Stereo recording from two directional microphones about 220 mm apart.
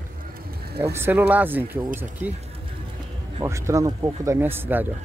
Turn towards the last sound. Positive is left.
turn(degrees=-10)  # may be behind; listen again after turning